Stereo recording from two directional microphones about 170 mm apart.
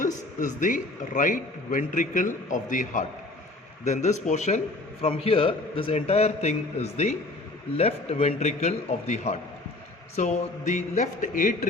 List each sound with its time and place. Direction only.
0.0 s a man's voice: 50° left (ahead or behind)